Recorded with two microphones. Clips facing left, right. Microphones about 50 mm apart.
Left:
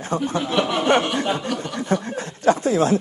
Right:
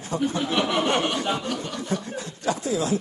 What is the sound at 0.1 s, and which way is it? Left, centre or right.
Speech, left.